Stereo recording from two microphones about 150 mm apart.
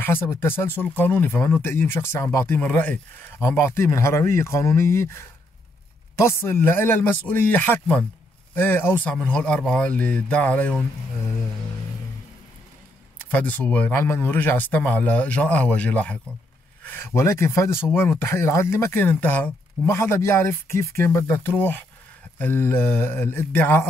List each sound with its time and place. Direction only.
0.0 s speech: 15° left (ahead or behind)
6.4 s speech: 15° left (ahead or behind)
13.3 s speech: 10° left (ahead or behind)